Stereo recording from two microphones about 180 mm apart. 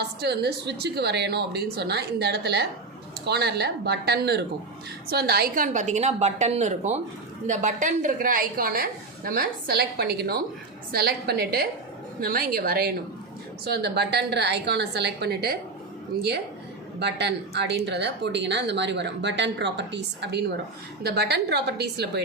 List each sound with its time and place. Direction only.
0.0 s a woman's voice: 65° right (ahead or behind)
17.0 s speech: 70° right (ahead or behind)